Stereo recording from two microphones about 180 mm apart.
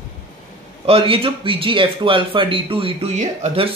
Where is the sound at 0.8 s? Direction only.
30° right (ahead or behind).